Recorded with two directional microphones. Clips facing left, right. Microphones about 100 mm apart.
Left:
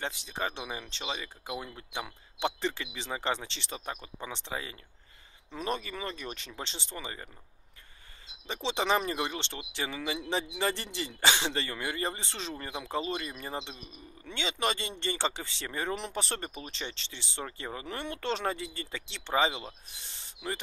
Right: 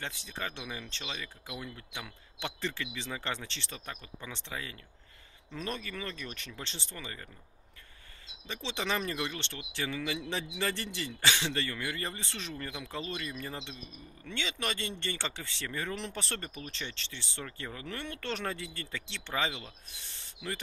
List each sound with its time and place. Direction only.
0.0 s speech: 20° left (ahead or behind)
8.5 s speech: 25° left (ahead or behind)
10.6 s speech: 20° left (ahead or behind)
20.2 s rub: 20° left (ahead or behind)